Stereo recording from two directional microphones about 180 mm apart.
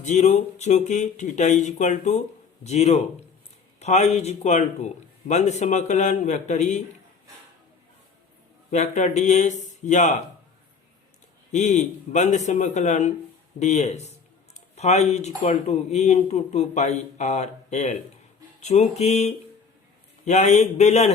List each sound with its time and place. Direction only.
0.0 s speech: 40° left (ahead or behind)
8.7 s speech: 40° left (ahead or behind)
11.5 s speech: 40° left (ahead or behind)